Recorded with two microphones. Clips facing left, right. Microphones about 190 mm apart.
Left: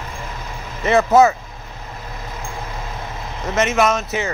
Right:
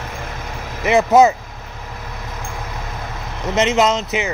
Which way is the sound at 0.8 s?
15° right (ahead or behind).